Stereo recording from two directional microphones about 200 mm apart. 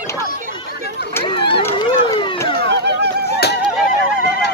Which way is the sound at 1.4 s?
25° left (ahead or behind).